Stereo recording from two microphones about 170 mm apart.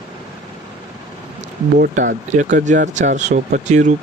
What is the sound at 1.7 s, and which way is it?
Speech, 50° right (ahead or behind).